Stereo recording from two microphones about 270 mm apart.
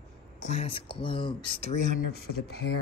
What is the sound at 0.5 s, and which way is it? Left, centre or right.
Speech, centre.